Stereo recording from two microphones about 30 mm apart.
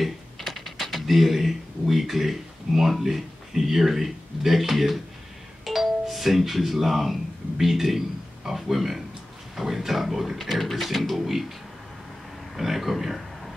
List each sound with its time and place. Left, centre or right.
0.4 s speech: centre
12.5 s speech: centre